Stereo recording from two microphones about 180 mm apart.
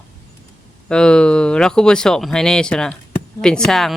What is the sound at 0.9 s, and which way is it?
Speech, 5° left (ahead or behind).